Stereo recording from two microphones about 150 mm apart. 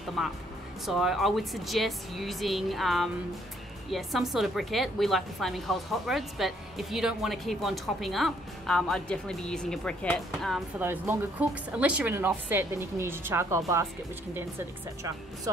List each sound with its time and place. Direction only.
0.2 s a woman's voice: centre (ahead or behind)
10.8 s speech: 15° right (ahead or behind)